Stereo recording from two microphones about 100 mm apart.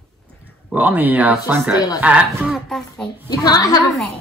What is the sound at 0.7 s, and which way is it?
Speech, 15° right (ahead or behind).